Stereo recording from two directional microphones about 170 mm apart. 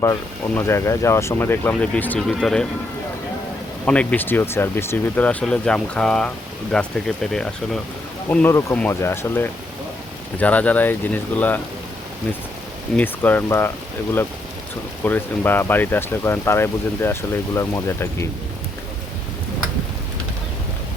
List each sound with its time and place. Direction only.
0.0 s speech: 15° left (ahead or behind)
3.8 s speech: 10° left (ahead or behind)
13.0 s speech: 10° left (ahead or behind)
15.0 s speech: 10° left (ahead or behind)